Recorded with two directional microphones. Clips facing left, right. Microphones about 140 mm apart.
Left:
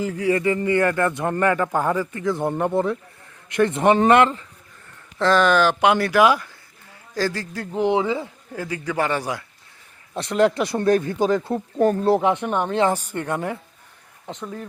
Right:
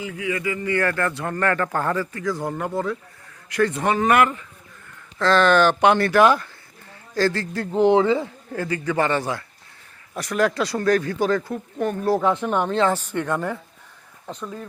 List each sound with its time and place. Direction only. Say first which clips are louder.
0.0 s speech: left 6 dB; 40° left (ahead or behind)
5.2 s speech: even; 10° left (ahead or behind)
10.2 s speech: left 3 dB; 25° left (ahead or behind)
11.5 s speech: left 6 dB; 35° left (ahead or behind)
12.0 s speech: left 2 dB; 20° left (ahead or behind)